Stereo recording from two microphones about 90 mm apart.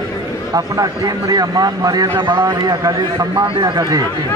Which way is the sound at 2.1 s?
55° right (ahead or behind).